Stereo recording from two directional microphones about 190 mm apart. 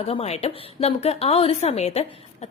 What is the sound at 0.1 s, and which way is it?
A woman's voice, 30° left (ahead or behind).